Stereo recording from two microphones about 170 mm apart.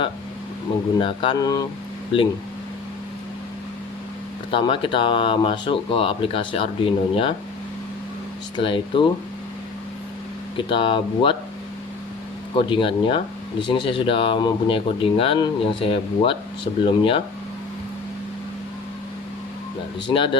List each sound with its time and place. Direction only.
0.9 s speech: 30° left (ahead or behind)
4.5 s speech: 30° left (ahead or behind)
8.5 s speech: 30° left (ahead or behind)
10.6 s speech: 30° left (ahead or behind)
12.5 s speech: 30° left (ahead or behind)
20.1 s speech: 30° left (ahead or behind)